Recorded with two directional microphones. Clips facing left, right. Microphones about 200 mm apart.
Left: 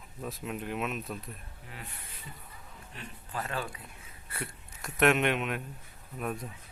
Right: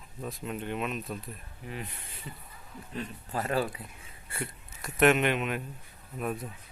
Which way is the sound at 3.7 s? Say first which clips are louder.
Right 3 dB; 25° right (ahead or behind).